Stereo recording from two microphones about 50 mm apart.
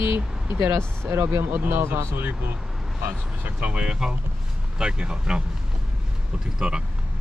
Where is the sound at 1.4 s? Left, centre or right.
Right.